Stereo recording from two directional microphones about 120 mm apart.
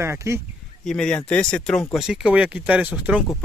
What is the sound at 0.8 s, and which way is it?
Speech, 5° left (ahead or behind).